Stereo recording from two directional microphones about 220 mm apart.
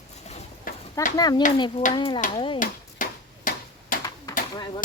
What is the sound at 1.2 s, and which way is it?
A child's voice, 20° left (ahead or behind).